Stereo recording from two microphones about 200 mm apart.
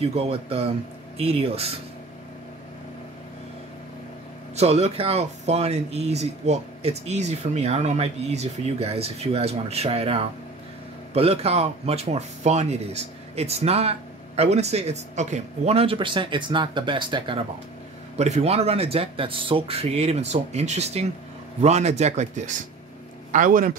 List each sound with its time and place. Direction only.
0.0 s speech: 30° right (ahead or behind)
4.6 s speech: 30° right (ahead or behind)